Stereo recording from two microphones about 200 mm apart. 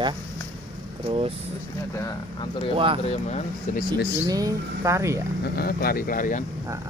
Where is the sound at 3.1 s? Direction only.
35° left (ahead or behind).